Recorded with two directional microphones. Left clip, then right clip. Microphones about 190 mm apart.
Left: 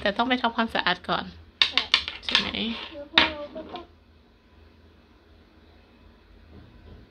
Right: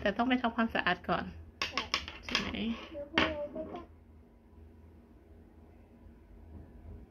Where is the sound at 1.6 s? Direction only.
25° left (ahead or behind).